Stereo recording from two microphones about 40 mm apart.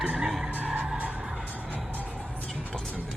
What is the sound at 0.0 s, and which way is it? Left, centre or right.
Vehicle, centre.